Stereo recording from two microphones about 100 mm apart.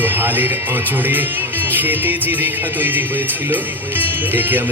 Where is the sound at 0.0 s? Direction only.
20° right (ahead or behind).